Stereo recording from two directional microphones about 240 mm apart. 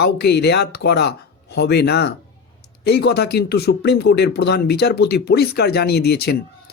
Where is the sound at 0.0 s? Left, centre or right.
Left.